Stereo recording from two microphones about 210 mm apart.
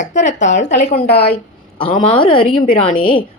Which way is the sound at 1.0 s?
50° left (ahead or behind).